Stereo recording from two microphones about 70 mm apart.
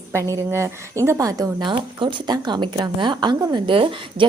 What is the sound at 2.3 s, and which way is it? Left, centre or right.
A woman's voice, right.